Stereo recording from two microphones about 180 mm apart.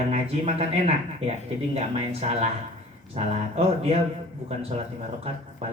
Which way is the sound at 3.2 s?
35° right (ahead or behind).